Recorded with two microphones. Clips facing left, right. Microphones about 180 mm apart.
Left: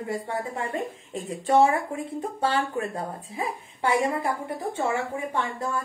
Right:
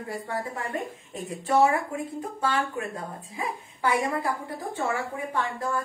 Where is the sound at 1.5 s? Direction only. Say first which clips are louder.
Left 2 dB; 30° left (ahead or behind).